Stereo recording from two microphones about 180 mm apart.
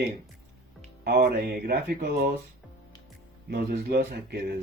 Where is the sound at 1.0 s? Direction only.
55° right (ahead or behind).